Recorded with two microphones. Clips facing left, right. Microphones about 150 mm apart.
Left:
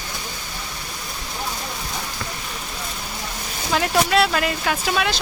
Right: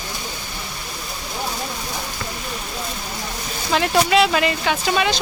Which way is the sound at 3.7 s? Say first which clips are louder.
Right 2 dB; centre (ahead or behind).